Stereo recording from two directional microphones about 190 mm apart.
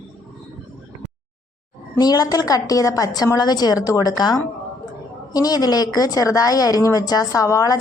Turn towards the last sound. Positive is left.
turn(degrees=15)  # may be behind; listen again after turning